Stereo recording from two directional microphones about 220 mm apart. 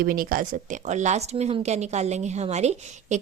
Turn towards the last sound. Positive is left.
turn(degrees=-30)  # may be behind; listen again after turning